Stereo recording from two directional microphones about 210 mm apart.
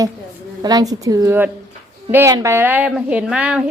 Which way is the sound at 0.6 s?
20° right (ahead or behind).